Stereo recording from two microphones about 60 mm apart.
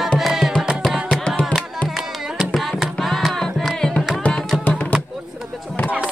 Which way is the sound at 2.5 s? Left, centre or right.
Centre.